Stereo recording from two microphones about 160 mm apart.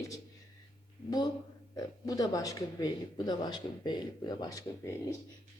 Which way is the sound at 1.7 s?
25° left (ahead or behind).